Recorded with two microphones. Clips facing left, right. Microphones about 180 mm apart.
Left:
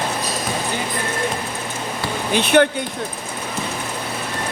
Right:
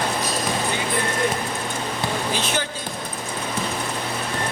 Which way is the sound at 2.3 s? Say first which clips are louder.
Left 10 dB; 60° left (ahead or behind).